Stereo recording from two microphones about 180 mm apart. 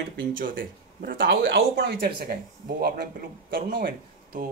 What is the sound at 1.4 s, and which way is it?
A man's voice, 70° right (ahead or behind).